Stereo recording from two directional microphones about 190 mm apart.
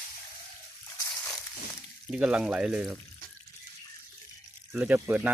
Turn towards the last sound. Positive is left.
turn(degrees=-10)  # may be behind; listen again after turning